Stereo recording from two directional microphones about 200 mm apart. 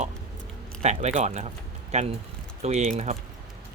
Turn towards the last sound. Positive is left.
turn(degrees=-35)  # may be behind; listen again after turning